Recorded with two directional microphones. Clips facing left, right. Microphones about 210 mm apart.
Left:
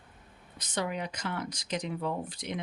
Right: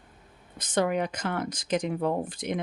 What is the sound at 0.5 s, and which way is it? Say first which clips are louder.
Speech: right 8 dB; 50° right (ahead or behind).